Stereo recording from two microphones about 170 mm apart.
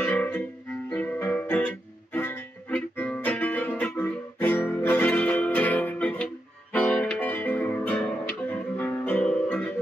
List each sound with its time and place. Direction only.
0.0 s music: 10° left (ahead or behind)